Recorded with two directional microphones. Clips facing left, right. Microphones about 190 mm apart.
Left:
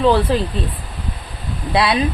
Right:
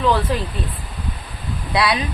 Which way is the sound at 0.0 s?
30° left (ahead or behind).